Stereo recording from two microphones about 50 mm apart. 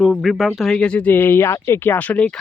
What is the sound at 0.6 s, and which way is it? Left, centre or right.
Speech, centre.